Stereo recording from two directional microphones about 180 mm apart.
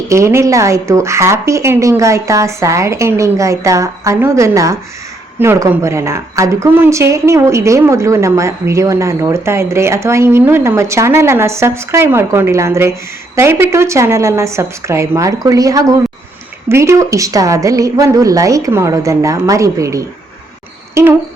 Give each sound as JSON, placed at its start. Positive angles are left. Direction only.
{"t": 0.1, "sound": "speech", "side_deg": -15}